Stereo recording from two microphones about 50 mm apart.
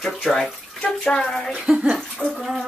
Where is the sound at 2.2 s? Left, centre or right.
Right.